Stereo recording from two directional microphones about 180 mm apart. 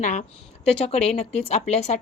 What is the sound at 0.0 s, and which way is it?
A woman's voice, 40° left (ahead or behind).